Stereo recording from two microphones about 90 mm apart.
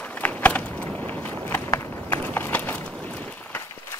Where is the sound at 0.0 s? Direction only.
15° left (ahead or behind).